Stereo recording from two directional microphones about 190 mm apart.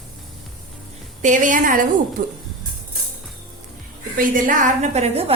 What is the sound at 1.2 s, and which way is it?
A woman's voice, 40° right (ahead or behind).